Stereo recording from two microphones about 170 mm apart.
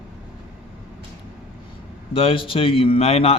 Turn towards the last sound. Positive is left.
turn(degrees=35)  # may be behind; listen again after turning